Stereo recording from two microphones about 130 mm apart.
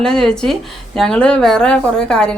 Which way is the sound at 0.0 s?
5° left (ahead or behind).